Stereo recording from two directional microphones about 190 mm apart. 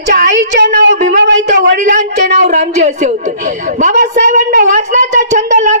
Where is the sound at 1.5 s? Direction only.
40° right (ahead or behind).